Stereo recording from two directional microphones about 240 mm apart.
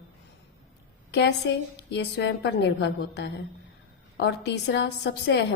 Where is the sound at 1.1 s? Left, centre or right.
Left.